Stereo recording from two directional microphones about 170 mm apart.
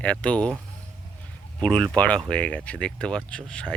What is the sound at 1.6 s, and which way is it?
Speech, 5° left (ahead or behind).